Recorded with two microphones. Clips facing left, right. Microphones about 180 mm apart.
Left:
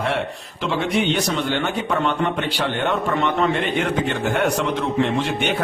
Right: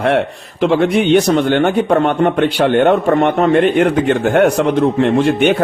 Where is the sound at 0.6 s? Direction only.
55° right (ahead or behind).